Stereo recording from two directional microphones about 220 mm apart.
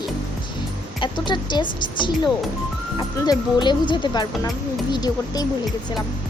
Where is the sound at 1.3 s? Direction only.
20° left (ahead or behind).